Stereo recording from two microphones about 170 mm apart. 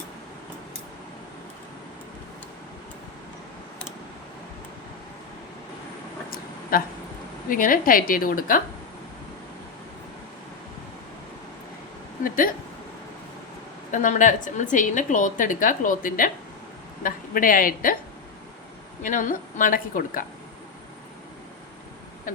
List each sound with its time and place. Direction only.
6.3 s a sound: 60° left (ahead or behind)
7.5 s a woman's voice: 55° left (ahead or behind)
13.9 s a woman's voice: 50° left (ahead or behind)
19.0 s a woman's voice: 50° left (ahead or behind)